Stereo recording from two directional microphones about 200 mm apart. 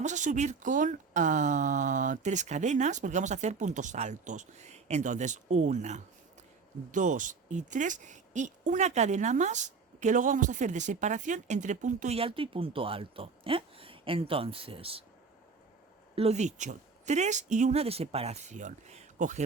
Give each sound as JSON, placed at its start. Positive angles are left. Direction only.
{"t": 0.0, "sound": "speech", "side_deg": -35}
{"t": 16.1, "sound": "speech", "side_deg": -30}